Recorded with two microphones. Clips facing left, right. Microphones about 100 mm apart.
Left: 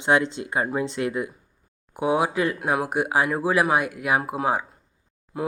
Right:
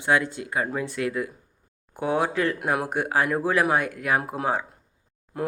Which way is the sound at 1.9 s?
10° left (ahead or behind).